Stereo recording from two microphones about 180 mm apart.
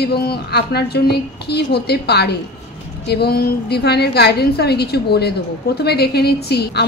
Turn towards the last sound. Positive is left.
turn(degrees=65)  # may be behind; listen again after turning